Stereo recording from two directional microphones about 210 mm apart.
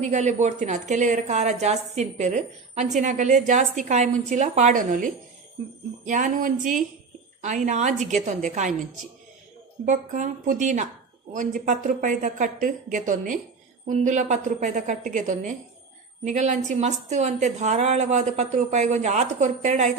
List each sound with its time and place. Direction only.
0.0 s a woman's voice: 35° right (ahead or behind)
9.8 s a woman's voice: 35° right (ahead or behind)